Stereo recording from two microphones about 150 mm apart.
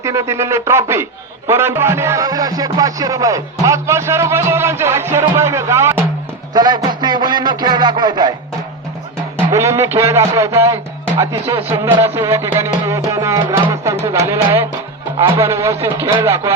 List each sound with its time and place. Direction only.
0.0 s a man's voice: 20° right (ahead or behind)
9.5 s a man's voice: 20° right (ahead or behind)